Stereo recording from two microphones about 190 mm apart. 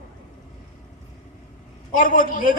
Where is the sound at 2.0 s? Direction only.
45° left (ahead or behind).